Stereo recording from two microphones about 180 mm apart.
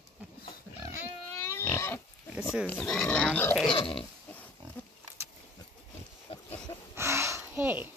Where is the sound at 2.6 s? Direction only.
5° left (ahead or behind).